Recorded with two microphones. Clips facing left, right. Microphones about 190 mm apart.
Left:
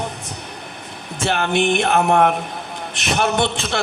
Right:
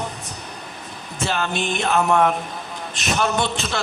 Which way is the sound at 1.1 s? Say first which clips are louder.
Left 5 dB; 60° left (ahead or behind).